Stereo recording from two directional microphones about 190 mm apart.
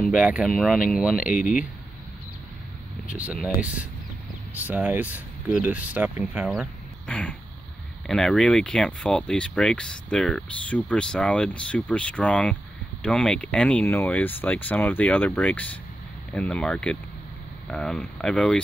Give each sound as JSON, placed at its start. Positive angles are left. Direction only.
{"t": 0.0, "sound": "speech", "side_deg": -5}
{"t": 1.2, "sound": "speech", "side_deg": 45}
{"t": 3.1, "sound": "speech", "side_deg": -10}